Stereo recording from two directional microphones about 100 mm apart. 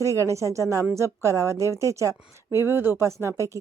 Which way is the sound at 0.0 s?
30° right (ahead or behind).